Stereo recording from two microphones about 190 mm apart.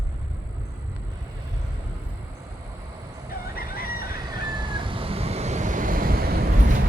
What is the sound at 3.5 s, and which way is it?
Fowl, 50° left (ahead or behind).